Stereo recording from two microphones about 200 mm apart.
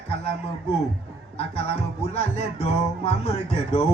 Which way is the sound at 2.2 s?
30° left (ahead or behind).